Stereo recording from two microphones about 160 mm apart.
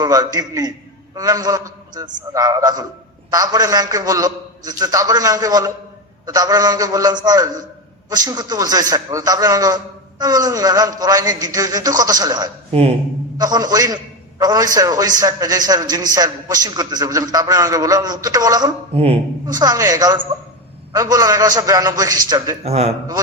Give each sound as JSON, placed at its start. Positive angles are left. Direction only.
{"t": 0.0, "sound": "a man's voice", "side_deg": -25}
{"t": 18.9, "sound": "speech", "side_deg": -40}
{"t": 19.5, "sound": "a man's voice", "side_deg": -25}
{"t": 22.6, "sound": "speech", "side_deg": -40}